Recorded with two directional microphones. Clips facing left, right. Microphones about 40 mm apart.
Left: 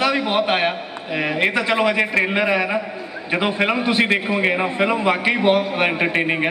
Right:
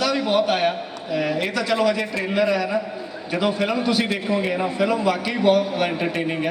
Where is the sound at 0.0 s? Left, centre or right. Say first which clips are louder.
Left 1 dB; left.